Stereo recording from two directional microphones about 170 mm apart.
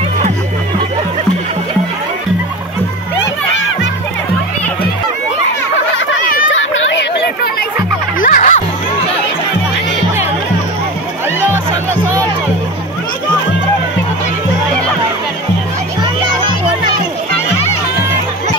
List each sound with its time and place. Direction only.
8.2 s music: 50° left (ahead or behind)